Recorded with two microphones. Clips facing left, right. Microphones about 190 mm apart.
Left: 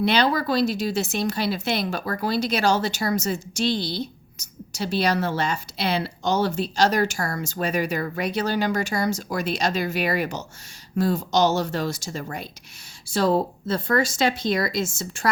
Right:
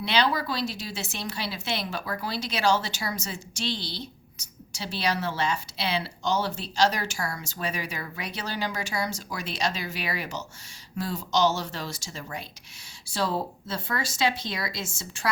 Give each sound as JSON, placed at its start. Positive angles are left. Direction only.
{"t": 0.0, "sound": "speech", "side_deg": 45}